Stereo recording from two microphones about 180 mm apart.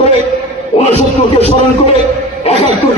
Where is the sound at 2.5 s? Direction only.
35° left (ahead or behind).